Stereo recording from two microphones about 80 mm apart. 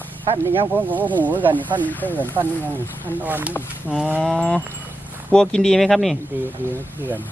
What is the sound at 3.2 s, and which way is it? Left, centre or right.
Speech, right.